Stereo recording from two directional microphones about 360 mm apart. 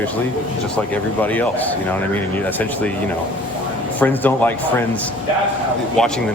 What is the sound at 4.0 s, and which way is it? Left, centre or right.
Speech, centre.